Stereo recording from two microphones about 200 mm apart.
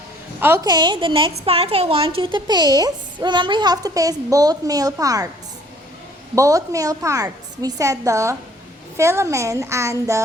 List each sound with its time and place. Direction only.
0.3 s a woman's voice: 10° right (ahead or behind)
6.3 s a woman's voice: 15° right (ahead or behind)